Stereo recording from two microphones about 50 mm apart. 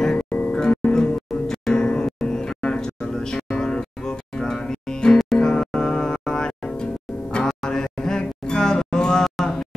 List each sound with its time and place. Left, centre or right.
0.3 s music: left
0.6 s music: centre
1.3 s music: centre